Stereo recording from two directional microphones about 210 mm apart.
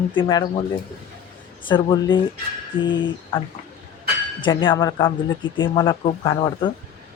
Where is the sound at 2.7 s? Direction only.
65° left (ahead or behind).